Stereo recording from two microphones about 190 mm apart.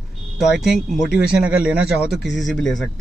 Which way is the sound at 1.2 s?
5° right (ahead or behind).